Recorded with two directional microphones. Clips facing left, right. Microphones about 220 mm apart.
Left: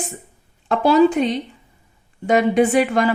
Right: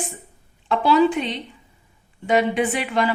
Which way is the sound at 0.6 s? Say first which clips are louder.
Left 3 dB; 45° left (ahead or behind).